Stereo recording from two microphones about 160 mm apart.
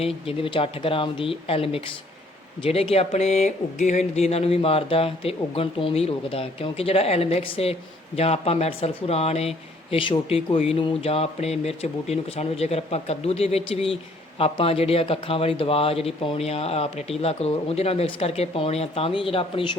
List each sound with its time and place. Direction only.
0.0 s speech: 35° left (ahead or behind)